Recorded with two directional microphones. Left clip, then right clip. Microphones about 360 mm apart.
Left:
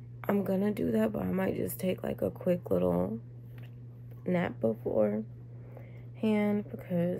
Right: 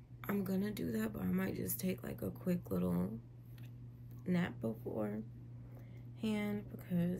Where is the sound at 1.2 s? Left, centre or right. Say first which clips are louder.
Left 9 dB; centre.